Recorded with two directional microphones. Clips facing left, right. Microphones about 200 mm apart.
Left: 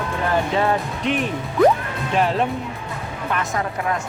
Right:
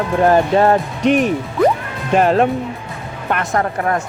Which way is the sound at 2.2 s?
55° right (ahead or behind).